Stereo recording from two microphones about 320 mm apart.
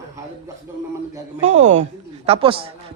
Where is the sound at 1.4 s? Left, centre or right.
Right.